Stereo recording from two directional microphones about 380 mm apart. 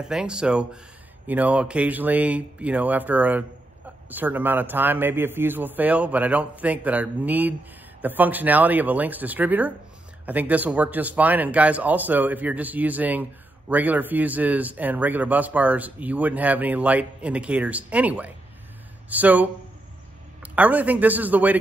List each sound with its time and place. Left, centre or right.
0.0 s speech: centre